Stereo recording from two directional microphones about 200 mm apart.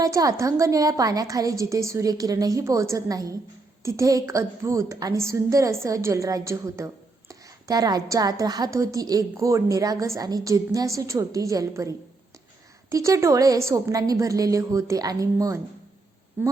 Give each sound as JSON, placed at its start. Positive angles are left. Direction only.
{"t": 0.0, "sound": "a woman's voice", "side_deg": -15}